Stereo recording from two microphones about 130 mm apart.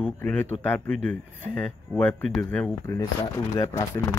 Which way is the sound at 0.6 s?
15° left (ahead or behind).